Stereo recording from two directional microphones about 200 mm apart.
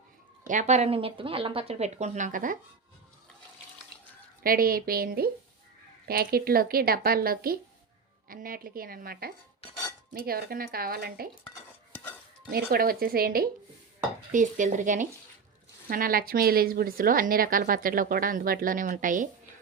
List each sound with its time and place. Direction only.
0.4 s a woman's voice: 35° right (ahead or behind)
4.4 s a woman's voice: 45° right (ahead or behind)
12.5 s a woman's voice: 50° right (ahead or behind)